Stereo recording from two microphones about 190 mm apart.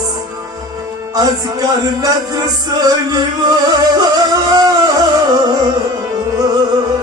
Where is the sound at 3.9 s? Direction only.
20° right (ahead or behind).